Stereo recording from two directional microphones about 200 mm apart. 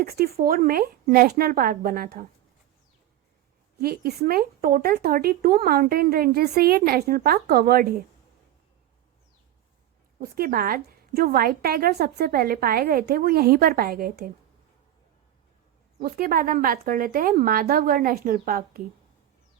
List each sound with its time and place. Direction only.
0.0 s speech: 50° right (ahead or behind)
3.8 s speech: 50° right (ahead or behind)
10.2 s speech: 45° right (ahead or behind)
16.0 s speech: 50° right (ahead or behind)